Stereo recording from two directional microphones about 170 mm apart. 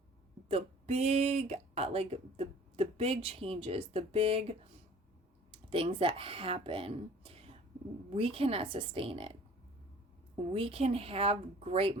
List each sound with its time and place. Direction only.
0.4 s speech: 35° right (ahead or behind)
10.5 s speech: 35° right (ahead or behind)